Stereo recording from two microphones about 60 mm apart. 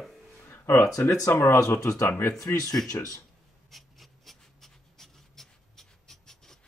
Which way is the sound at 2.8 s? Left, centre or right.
Left.